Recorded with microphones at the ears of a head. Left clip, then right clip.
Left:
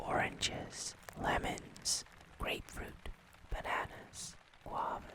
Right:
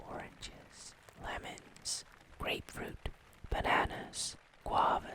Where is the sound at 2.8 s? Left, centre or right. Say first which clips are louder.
Right 5 dB; right.